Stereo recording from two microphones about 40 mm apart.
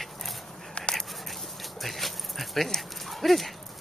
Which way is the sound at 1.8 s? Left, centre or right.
Centre.